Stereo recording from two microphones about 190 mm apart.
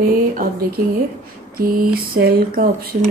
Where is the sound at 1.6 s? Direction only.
50° right (ahead or behind).